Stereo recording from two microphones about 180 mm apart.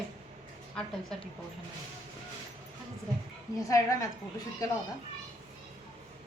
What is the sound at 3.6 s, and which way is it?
Speech, 20° left (ahead or behind).